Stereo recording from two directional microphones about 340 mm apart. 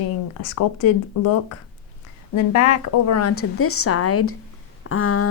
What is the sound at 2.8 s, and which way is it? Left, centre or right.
A woman's voice, left.